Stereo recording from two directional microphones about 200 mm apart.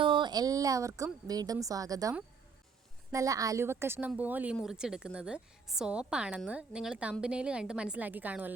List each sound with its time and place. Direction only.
0.0 s a woman's voice: 25° right (ahead or behind); by 8.5 s 10° right (ahead or behind)